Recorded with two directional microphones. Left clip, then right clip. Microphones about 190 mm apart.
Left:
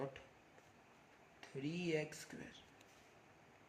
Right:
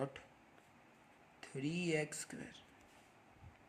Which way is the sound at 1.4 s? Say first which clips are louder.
Right 3 dB; 35° right (ahead or behind).